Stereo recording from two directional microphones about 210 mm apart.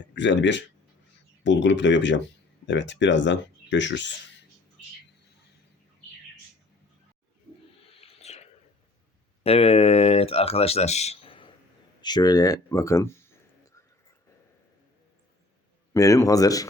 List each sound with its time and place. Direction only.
0.1 s speech: 60° left (ahead or behind)
7.9 s whispering: 30° left (ahead or behind)
9.4 s speech: 30° left (ahead or behind); by 13.3 s 10° left (ahead or behind)
15.9 s speech: 15° left (ahead or behind)